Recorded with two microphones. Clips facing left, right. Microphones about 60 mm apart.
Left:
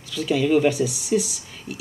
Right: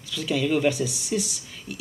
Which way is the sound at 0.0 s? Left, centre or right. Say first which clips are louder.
Left 4 dB; centre.